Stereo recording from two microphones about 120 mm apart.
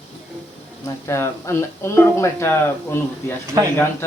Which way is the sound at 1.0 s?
25° left (ahead or behind).